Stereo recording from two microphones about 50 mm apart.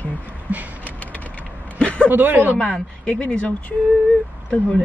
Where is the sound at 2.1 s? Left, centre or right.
Right.